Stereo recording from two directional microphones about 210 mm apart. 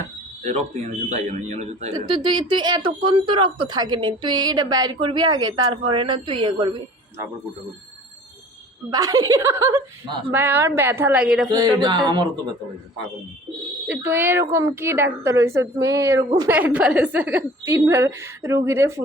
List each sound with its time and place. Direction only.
0.4 s speech: 35° right (ahead or behind)
2.0 s speech: 20° right (ahead or behind)
8.9 s a woman's voice: 15° right (ahead or behind)
11.5 s speech: 20° right (ahead or behind)
13.8 s a woman's voice: 10° right (ahead or behind)